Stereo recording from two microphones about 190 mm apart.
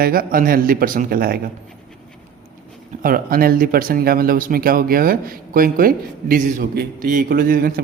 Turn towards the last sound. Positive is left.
turn(degrees=-50)  # may be behind; listen again after turning